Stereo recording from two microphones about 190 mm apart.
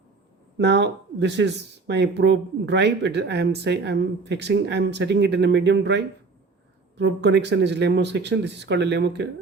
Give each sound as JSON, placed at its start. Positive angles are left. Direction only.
{"t": 0.6, "sound": "speech", "side_deg": -65}